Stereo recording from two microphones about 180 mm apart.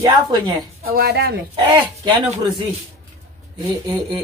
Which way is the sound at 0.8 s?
60° right (ahead or behind).